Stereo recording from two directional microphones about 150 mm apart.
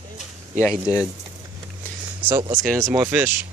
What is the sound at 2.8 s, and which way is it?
Speech, 20° right (ahead or behind).